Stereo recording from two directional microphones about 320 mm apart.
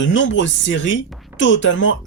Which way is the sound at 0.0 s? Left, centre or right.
Left.